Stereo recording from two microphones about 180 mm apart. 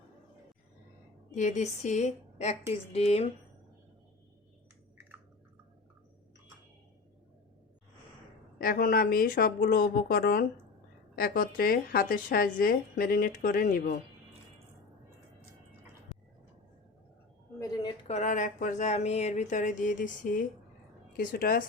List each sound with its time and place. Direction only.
1.4 s speech: 40° left (ahead or behind)
8.5 s speech: 55° left (ahead or behind)
18.1 s speech: 40° left (ahead or behind)